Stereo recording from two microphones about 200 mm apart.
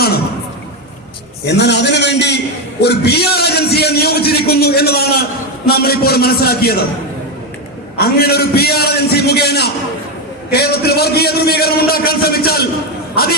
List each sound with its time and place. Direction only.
1.5 s a sound: 60° left (ahead or behind)
2.8 s a man's voice: 55° left (ahead or behind)
7.9 s a man's voice: 50° left (ahead or behind)